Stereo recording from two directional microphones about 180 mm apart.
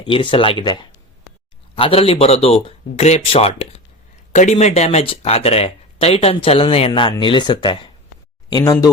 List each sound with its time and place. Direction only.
0.0 s speech: 30° left (ahead or behind)